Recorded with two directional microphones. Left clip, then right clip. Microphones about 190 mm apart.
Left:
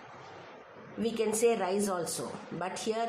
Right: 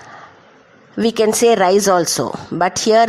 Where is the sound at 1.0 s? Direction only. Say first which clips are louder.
Right 15 dB; 50° right (ahead or behind).